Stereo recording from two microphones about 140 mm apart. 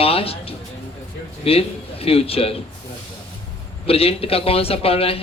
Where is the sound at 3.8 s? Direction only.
45° left (ahead or behind).